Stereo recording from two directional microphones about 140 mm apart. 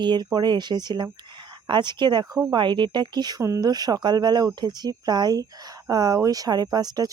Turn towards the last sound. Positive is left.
turn(degrees=-30)  # may be behind; listen again after turning